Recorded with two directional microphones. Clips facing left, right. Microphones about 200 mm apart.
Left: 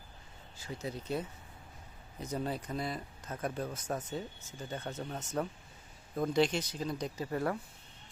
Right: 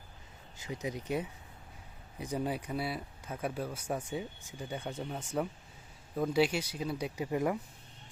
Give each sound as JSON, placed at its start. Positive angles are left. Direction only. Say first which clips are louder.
{"t": 0.5, "sound": "speech", "louder": "right 2 dB", "side_deg": -20}